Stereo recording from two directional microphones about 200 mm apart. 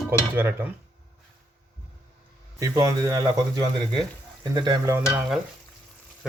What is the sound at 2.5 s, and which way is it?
Speech, 15° right (ahead or behind).